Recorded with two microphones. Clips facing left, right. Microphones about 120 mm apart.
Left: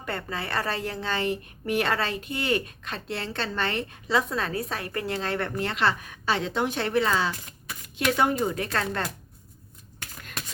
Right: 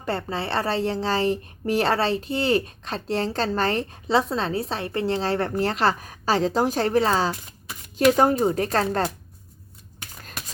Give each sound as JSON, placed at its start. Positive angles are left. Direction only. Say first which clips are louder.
{"t": 0.0, "sound": "speech", "louder": "right 5 dB", "side_deg": -30}